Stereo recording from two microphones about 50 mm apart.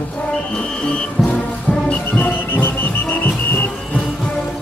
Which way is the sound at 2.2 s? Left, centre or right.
Left.